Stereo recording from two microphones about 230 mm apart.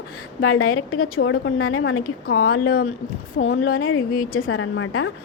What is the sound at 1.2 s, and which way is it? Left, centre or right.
A woman's voice, left.